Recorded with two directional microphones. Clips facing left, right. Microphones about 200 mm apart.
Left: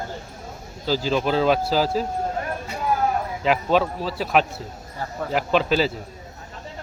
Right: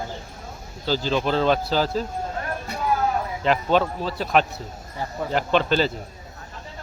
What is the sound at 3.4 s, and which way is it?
A man's voice, 5° left (ahead or behind).